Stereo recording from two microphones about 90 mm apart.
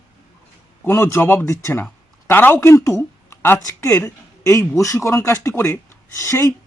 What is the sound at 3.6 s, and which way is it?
Speech, 40° left (ahead or behind).